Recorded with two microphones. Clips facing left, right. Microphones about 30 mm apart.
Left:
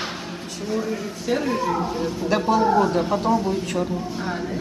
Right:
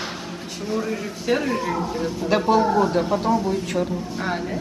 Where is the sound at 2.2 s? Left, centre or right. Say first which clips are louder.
Right 2 dB; centre.